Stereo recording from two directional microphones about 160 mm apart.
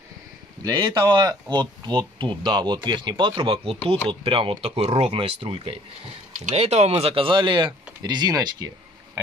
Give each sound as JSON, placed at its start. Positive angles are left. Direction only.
{"t": 0.7, "sound": "speech", "side_deg": -30}